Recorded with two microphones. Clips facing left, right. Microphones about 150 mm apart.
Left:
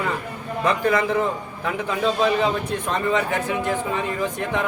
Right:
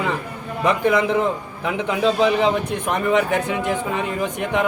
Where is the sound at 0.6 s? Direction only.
20° right (ahead or behind).